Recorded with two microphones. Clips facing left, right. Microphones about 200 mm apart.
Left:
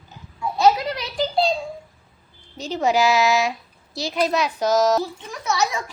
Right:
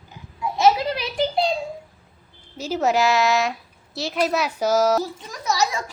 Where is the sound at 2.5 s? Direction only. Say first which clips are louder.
Even; 5° right (ahead or behind).